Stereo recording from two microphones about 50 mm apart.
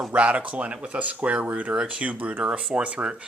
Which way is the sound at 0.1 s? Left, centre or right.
Right.